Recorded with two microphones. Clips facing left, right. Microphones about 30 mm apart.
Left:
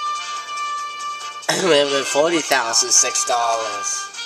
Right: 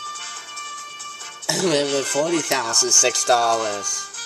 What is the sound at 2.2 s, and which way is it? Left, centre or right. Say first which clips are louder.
Speech: left 6 dB; left.